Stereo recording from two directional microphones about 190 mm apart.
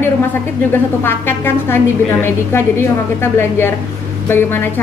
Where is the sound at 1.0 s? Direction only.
10° left (ahead or behind).